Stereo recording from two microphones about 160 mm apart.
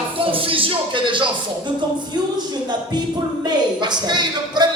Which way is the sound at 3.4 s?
25° right (ahead or behind).